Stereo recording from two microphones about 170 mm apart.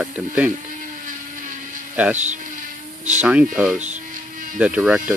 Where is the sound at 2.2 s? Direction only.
45° right (ahead or behind).